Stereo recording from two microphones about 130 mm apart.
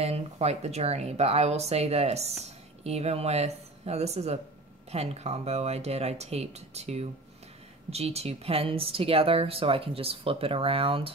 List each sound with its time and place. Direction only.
0.0 s speech: 55° right (ahead or behind)